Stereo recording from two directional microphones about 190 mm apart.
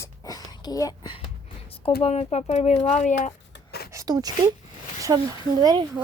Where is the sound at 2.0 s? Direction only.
35° left (ahead or behind).